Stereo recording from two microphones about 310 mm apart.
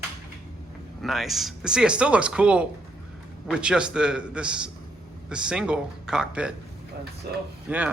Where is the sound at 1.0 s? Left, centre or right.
Centre.